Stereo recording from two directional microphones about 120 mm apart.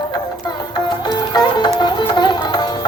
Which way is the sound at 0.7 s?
35° left (ahead or behind).